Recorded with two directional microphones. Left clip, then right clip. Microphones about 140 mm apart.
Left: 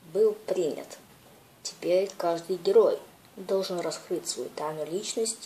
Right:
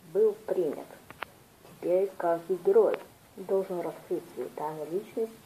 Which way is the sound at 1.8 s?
30° left (ahead or behind).